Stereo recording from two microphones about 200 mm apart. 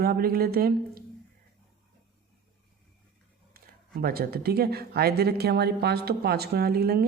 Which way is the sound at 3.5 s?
50° right (ahead or behind).